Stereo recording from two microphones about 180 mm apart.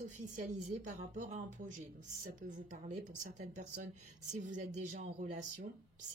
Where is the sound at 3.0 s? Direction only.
40° right (ahead or behind).